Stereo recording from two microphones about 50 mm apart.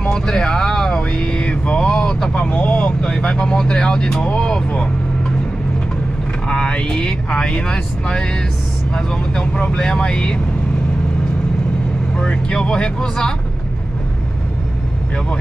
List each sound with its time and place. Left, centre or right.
0.1 s vehicle: centre
6.5 s speech: centre
12.2 s speech: centre